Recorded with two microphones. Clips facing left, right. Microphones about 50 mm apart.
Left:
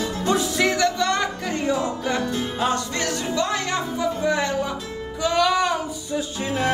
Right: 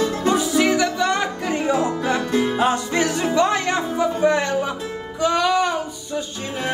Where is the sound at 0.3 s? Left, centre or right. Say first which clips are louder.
Right 2 dB; centre; by 2.2 s right.